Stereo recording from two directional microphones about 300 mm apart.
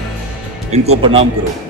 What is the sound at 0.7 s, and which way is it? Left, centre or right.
Speech, right.